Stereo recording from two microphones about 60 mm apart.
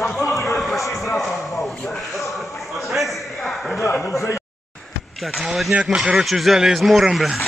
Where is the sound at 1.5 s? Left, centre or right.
Centre.